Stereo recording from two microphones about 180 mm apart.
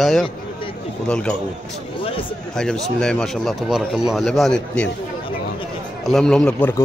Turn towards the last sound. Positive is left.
turn(degrees=10)  # may be behind; listen again after turning